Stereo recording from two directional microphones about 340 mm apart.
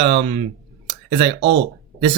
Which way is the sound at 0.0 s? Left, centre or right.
Centre.